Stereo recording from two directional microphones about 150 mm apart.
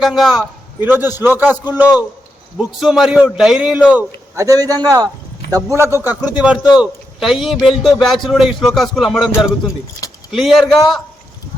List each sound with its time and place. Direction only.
0.0 s a man's voice: centre (ahead or behind)
0.8 s a man's voice: 15° right (ahead or behind)
4.4 s a man's voice: 20° right (ahead or behind); by 9.3 s centre (ahead or behind)
10.3 s a man's voice: centre (ahead or behind)